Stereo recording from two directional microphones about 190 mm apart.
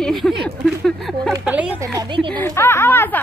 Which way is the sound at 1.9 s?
25° right (ahead or behind).